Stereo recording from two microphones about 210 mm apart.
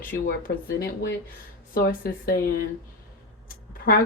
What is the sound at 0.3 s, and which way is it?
Speech, 45° left (ahead or behind).